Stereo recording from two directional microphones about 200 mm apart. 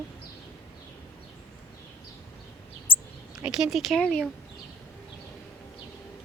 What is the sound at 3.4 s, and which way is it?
Speech, 5° right (ahead or behind).